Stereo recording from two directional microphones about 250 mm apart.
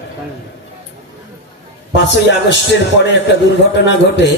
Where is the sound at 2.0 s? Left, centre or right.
Left.